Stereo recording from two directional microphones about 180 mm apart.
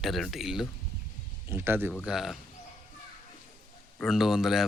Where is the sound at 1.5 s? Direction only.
10° right (ahead or behind).